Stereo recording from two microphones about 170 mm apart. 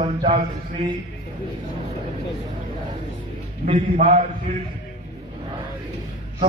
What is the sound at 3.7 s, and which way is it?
Speech, 45° right (ahead or behind).